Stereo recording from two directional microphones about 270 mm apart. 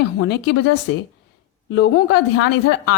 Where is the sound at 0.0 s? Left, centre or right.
Left.